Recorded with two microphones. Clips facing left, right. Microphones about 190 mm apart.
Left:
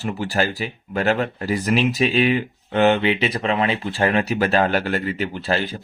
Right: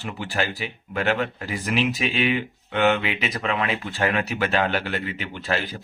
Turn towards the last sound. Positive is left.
turn(degrees=35)  # may be behind; listen again after turning